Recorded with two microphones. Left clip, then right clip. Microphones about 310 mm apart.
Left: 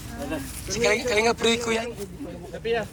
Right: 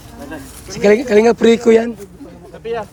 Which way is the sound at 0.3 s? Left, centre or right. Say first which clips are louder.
Right 1 dB; right.